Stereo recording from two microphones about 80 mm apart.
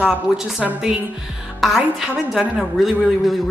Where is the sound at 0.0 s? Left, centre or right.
Centre.